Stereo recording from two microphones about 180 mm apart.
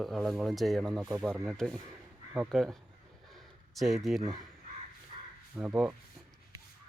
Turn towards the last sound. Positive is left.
turn(degrees=-10)  # may be behind; listen again after turning